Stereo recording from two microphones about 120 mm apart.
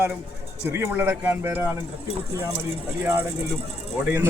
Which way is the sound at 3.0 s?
15° right (ahead or behind).